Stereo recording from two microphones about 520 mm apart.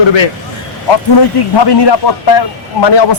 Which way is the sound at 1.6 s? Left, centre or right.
Left.